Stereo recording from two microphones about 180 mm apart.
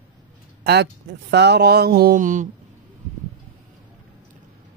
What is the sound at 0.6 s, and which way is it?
Mantra, 70° right (ahead or behind).